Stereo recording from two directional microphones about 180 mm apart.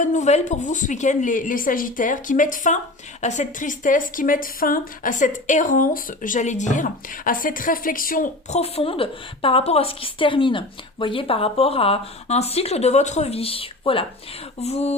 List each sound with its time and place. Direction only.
0.0 s a woman's voice: 40° left (ahead or behind)